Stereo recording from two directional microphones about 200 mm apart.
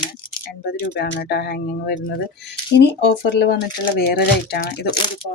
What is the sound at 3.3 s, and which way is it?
Speech, 55° left (ahead or behind).